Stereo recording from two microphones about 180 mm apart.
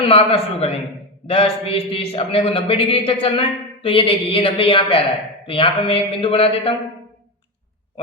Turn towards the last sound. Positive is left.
turn(degrees=30)  # may be behind; listen again after turning